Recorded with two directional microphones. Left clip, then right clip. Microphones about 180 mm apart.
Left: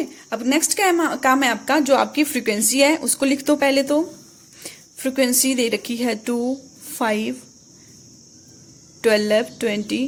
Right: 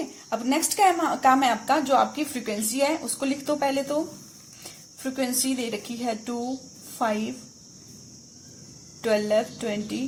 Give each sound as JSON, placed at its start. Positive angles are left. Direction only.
{"t": 0.3, "sound": "a woman's voice", "side_deg": 40}
{"t": 5.0, "sound": "a woman's voice", "side_deg": 50}
{"t": 9.0, "sound": "a woman's voice", "side_deg": 50}